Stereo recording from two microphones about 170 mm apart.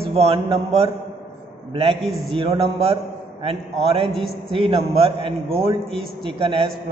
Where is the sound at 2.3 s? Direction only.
30° right (ahead or behind).